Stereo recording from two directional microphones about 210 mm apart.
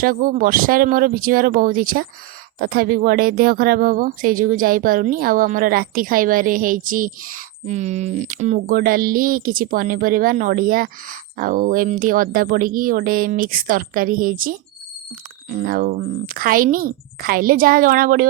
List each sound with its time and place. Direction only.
0.0 s speech: 40° right (ahead or behind)